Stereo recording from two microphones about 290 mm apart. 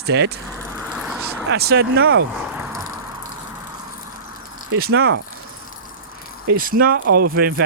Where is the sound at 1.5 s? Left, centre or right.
Right.